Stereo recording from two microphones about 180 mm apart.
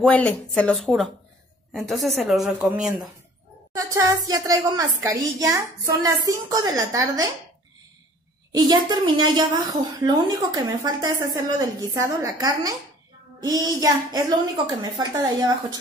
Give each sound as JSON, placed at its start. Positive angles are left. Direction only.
{"t": 0.0, "sound": "speech", "side_deg": 10}
{"t": 3.7, "sound": "music", "side_deg": -20}
{"t": 4.3, "sound": "a woman's voice", "side_deg": -20}
{"t": 8.5, "sound": "a woman's voice", "side_deg": -20}